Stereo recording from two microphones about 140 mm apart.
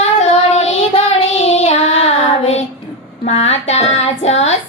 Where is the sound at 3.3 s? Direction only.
50° left (ahead or behind).